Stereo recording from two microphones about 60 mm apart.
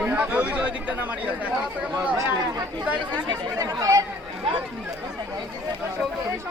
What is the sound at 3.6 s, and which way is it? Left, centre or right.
Speech, right.